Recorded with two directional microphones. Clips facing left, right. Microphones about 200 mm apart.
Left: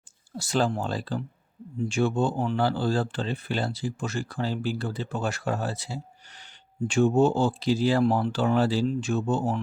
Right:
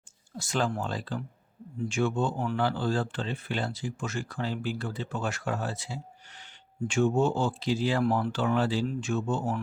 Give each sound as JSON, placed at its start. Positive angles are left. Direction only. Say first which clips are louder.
{"t": 0.3, "sound": "speech", "louder": "left 4 dB", "side_deg": 35}